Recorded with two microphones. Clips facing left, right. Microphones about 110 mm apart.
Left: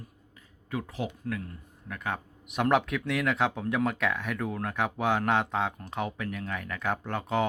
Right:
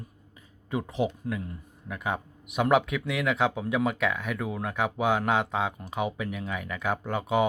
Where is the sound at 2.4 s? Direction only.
5° right (ahead or behind).